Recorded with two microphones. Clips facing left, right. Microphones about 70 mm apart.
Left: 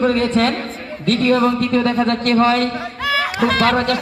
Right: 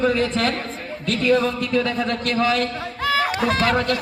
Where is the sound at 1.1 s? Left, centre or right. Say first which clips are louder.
Left 4 dB; left.